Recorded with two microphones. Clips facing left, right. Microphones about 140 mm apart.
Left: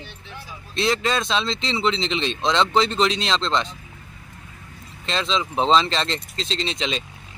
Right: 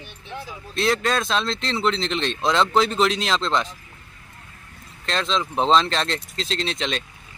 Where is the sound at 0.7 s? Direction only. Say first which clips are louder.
Even; centre (ahead or behind).